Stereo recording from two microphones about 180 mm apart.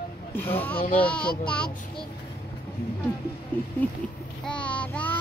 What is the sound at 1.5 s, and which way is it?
Child singing, 5° left (ahead or behind).